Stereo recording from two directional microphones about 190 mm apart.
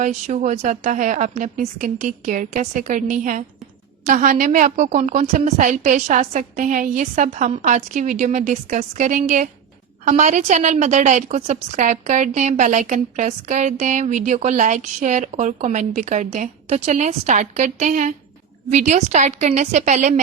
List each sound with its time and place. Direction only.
0.0 s a woman's voice: 40° right (ahead or behind)